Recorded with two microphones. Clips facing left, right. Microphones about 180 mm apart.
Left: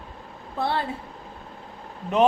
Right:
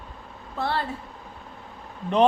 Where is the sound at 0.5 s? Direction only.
15° left (ahead or behind).